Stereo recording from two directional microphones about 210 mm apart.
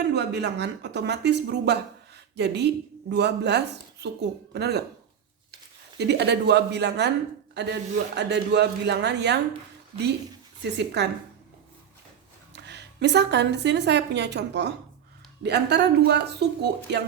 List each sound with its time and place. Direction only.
0.1 s a man's voice: 55° right (ahead or behind)
6.0 s a man's voice: 55° right (ahead or behind)
10.6 s a man's voice: 55° right (ahead or behind)
12.5 s a woman's voice: 55° right (ahead or behind)